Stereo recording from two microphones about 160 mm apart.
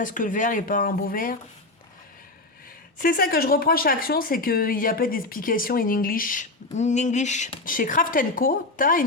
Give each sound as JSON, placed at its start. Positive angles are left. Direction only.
{"t": 0.0, "sound": "speech", "side_deg": 55}
{"t": 3.0, "sound": "speech", "side_deg": 65}